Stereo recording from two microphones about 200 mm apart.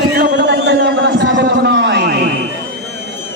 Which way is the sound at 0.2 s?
55° right (ahead or behind).